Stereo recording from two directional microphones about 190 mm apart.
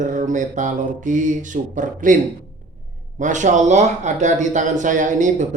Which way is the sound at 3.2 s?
40° right (ahead or behind).